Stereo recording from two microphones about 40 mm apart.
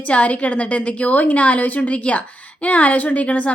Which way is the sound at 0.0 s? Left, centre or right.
Left.